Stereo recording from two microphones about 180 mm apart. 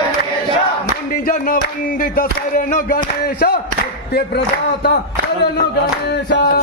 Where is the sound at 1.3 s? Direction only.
55° left (ahead or behind).